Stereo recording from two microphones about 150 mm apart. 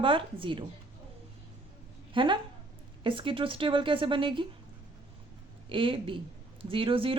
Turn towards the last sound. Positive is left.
turn(degrees=-35)  # may be behind; listen again after turning